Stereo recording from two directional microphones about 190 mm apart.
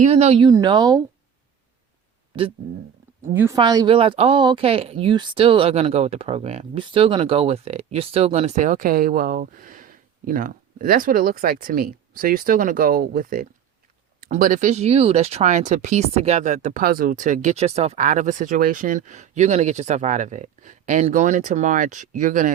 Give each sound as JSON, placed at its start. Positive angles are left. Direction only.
{"t": 0.0, "sound": "speech", "side_deg": -35}
{"t": 0.4, "sound": "speech", "side_deg": -20}
{"t": 3.3, "sound": "speech", "side_deg": -15}